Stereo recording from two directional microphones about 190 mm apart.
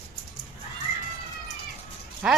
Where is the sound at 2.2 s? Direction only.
5° right (ahead or behind).